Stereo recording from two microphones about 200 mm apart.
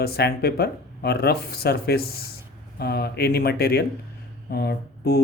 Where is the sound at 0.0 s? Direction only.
50° left (ahead or behind).